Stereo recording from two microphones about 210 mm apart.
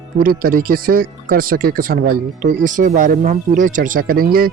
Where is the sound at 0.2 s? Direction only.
45° right (ahead or behind).